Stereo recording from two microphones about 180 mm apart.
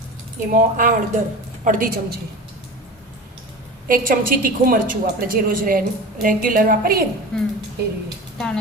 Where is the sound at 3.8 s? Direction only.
50° right (ahead or behind).